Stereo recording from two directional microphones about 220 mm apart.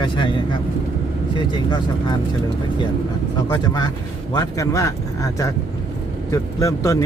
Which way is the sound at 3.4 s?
20° left (ahead or behind).